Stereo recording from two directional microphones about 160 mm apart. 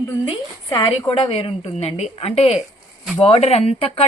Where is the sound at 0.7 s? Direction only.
30° left (ahead or behind).